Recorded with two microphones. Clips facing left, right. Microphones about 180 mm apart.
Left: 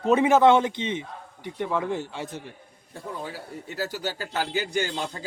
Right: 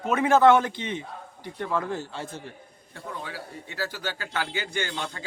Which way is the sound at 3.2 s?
40° left (ahead or behind).